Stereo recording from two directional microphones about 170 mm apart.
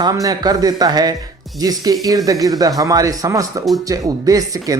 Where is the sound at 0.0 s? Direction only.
20° right (ahead or behind).